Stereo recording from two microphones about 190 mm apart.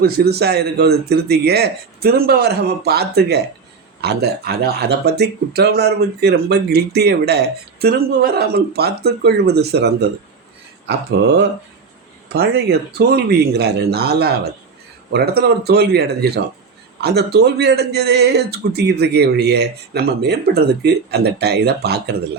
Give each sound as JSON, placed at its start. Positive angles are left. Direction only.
{"t": 0.0, "sound": "speech", "side_deg": -55}